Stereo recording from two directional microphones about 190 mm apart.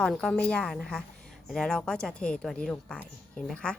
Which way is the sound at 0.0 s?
Centre (ahead or behind).